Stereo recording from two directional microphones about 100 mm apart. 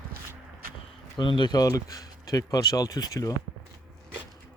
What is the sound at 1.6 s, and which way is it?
Speech, 35° left (ahead or behind).